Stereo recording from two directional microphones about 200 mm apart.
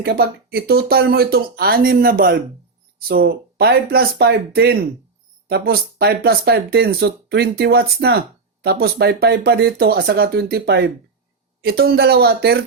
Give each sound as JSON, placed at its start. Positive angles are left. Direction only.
{"t": 0.0, "sound": "speech", "side_deg": -50}